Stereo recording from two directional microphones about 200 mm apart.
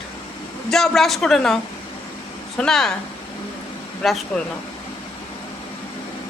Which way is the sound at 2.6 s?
5° left (ahead or behind).